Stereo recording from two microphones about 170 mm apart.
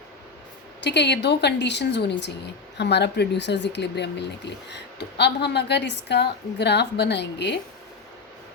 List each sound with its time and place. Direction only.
0.8 s speech: 90° left